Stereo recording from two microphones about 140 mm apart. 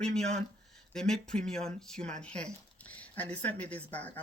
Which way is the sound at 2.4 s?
10° left (ahead or behind).